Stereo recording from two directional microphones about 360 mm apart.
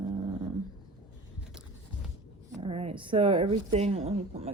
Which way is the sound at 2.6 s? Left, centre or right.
Centre.